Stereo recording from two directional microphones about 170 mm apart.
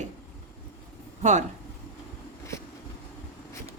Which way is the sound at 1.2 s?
45° right (ahead or behind).